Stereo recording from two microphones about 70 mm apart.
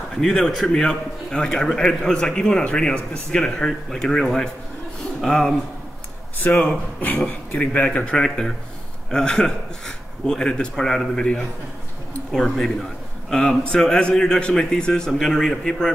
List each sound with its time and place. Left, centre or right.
0.1 s a man's voice: centre
6.4 s a man's voice: left; by 15.9 s centre